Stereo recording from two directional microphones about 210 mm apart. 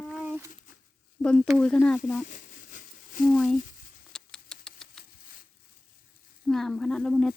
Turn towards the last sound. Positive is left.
turn(degrees=5)  # may be behind; listen again after turning